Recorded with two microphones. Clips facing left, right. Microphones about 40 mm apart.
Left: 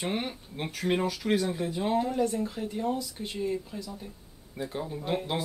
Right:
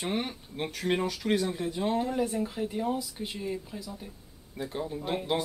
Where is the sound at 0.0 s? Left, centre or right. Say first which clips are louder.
Even; centre.